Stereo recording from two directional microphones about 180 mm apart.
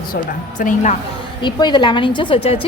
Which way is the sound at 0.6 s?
45° left (ahead or behind).